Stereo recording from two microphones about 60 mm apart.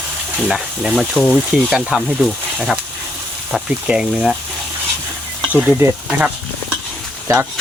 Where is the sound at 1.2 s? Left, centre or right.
Centre.